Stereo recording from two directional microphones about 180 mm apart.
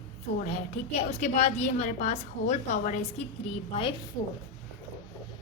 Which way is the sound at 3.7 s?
30° left (ahead or behind).